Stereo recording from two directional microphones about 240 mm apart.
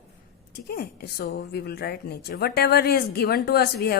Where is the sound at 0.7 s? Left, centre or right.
Left.